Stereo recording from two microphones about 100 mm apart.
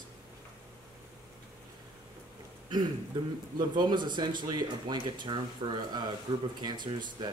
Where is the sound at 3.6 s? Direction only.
45° right (ahead or behind).